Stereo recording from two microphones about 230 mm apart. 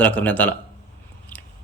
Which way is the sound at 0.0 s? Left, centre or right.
Centre.